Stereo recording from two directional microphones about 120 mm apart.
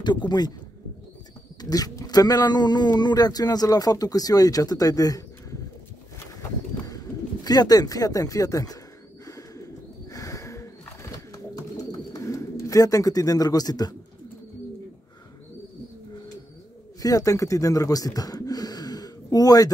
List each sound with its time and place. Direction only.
0.0 s speech: 40° left (ahead or behind)
1.6 s speech: 30° left (ahead or behind)
7.4 s speech: 35° left (ahead or behind)
9.2 s bird: 30° left (ahead or behind)
17.0 s speech: 30° left (ahead or behind)